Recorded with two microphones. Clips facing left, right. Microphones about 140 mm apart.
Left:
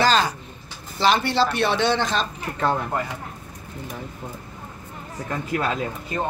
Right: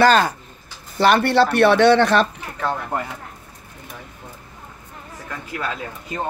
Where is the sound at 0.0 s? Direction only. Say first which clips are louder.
Right 5 dB; 55° right (ahead or behind).